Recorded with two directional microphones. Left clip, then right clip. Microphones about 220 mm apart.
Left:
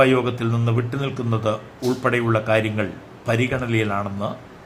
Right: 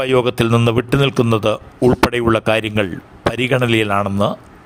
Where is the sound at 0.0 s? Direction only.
45° right (ahead or behind).